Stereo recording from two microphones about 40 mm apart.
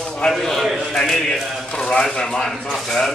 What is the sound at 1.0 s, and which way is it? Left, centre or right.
Speech, centre.